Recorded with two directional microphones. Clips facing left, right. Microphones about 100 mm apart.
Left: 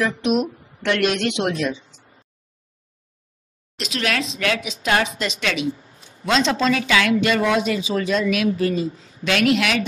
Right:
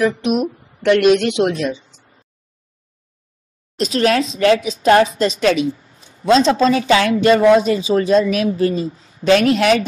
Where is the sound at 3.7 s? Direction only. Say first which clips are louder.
Right 9 dB; 40° right (ahead or behind).